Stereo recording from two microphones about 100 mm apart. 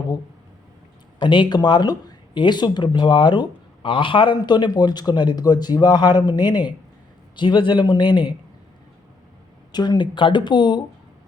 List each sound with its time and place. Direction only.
1.2 s a man's voice: 55° left (ahead or behind)
9.7 s a man's voice: 45° left (ahead or behind)